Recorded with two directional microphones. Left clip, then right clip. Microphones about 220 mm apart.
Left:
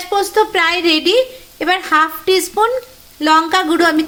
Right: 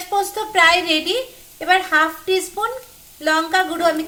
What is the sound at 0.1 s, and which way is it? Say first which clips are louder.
A woman's voice: left 6 dB; 50° left (ahead or behind).